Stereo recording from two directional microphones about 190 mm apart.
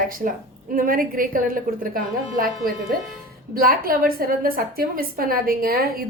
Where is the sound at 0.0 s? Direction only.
50° right (ahead or behind).